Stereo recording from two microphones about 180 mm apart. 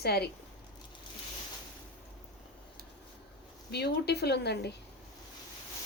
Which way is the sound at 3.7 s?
65° left (ahead or behind).